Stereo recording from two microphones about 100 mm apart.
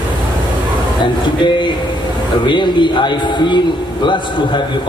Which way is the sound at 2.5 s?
50° left (ahead or behind).